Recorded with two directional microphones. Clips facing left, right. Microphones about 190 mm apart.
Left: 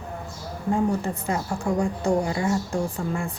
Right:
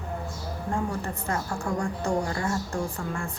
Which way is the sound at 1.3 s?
15° left (ahead or behind).